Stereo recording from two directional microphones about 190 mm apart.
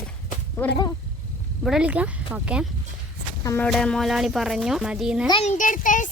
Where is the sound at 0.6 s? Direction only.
10° left (ahead or behind).